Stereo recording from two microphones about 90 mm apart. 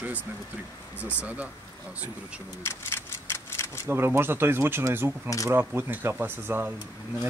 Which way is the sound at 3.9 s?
25° right (ahead or behind).